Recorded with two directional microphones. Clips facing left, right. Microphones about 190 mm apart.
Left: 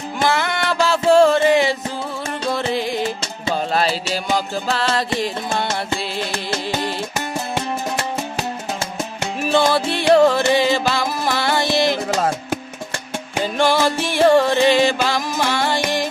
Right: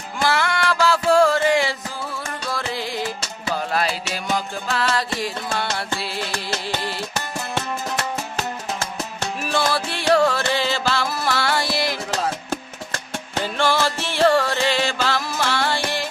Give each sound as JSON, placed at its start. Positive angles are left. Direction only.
{"t": 0.2, "sound": "music", "side_deg": 20}
{"t": 7.9, "sound": "music", "side_deg": 15}
{"t": 13.3, "sound": "music", "side_deg": 15}